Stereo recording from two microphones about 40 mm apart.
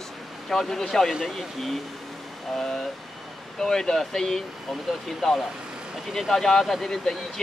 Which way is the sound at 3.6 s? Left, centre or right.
Centre.